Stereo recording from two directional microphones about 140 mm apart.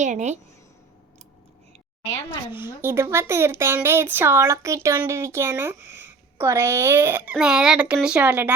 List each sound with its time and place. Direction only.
0.0 s a woman's voice: 60° right (ahead or behind)
2.8 s speech: 20° right (ahead or behind)